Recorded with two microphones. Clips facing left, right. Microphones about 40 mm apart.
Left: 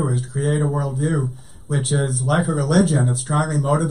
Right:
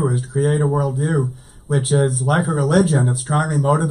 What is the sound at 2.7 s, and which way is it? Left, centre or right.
Speech, centre.